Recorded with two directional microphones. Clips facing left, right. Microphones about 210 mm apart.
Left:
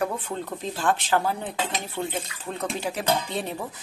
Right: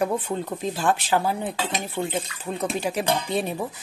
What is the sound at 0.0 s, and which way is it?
Speech, 15° right (ahead or behind).